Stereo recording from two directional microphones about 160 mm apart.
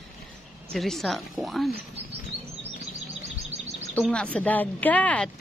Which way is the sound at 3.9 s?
5° left (ahead or behind).